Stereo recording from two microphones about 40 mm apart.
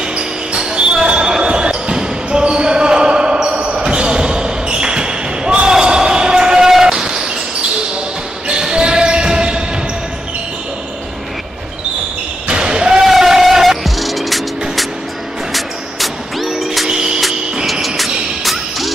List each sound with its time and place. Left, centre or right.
0.1 s basketball bounce: right
6.9 s a sound: centre
8.5 s basketball bounce: centre
12.4 s basketball bounce: right
13.0 s music: centre
15.5 s music: centre
16.9 s music: centre
17.8 s music: centre